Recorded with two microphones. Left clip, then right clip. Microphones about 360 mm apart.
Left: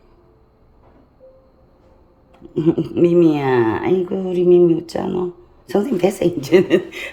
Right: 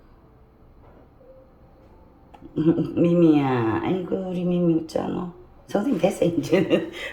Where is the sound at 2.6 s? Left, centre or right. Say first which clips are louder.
Left 5 dB; left.